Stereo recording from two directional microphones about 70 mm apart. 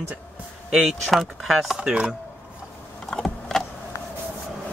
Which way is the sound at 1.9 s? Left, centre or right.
Centre.